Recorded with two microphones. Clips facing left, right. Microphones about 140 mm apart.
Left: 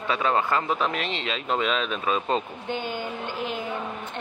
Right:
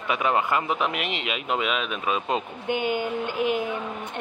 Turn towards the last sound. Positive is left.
turn(degrees=-55)  # may be behind; listen again after turning